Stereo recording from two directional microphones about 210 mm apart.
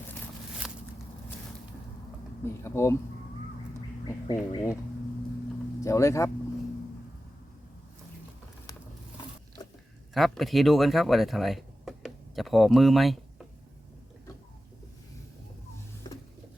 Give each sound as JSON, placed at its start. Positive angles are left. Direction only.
{"t": 2.4, "sound": "speech", "side_deg": 10}
{"t": 4.0, "sound": "speech", "side_deg": 20}
{"t": 5.8, "sound": "speech", "side_deg": 15}
{"t": 10.2, "sound": "speech", "side_deg": 0}